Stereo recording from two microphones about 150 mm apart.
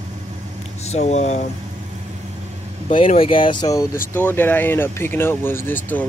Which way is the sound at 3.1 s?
35° left (ahead or behind).